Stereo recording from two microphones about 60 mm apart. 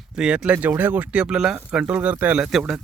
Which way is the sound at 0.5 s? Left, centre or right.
Right.